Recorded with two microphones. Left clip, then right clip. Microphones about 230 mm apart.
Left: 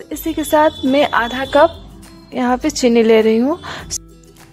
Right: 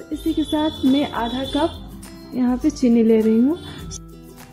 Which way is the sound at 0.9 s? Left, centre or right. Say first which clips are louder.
Left 8 dB; left.